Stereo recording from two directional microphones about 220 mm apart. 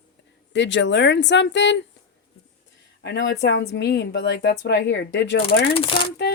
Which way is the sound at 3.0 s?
50° left (ahead or behind).